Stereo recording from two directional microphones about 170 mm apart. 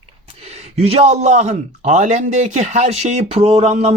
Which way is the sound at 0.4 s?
35° right (ahead or behind).